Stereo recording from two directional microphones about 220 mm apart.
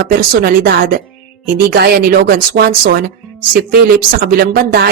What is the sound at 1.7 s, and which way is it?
Speech, 45° right (ahead or behind).